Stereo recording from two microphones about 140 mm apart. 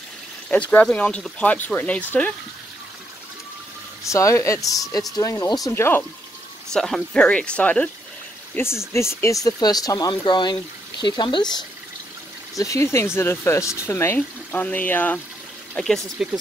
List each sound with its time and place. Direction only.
0.5 s speech: 10° left (ahead or behind)
4.1 s speech: 20° left (ahead or behind)
6.7 s speech: 5° left (ahead or behind)
8.5 s speech: 20° left (ahead or behind)
12.5 s speech: 20° left (ahead or behind); by 16.3 s 5° right (ahead or behind)